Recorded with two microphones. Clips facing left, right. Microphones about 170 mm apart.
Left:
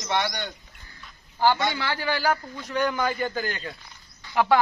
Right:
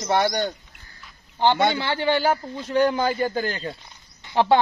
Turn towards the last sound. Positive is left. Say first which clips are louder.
# right 3 dB
turn(degrees=-25)  # may be behind; listen again after turning